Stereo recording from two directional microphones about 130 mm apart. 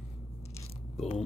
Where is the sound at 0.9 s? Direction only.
55° left (ahead or behind).